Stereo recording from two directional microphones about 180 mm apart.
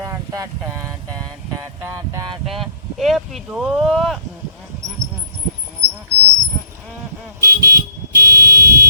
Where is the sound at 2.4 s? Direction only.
Centre (ahead or behind).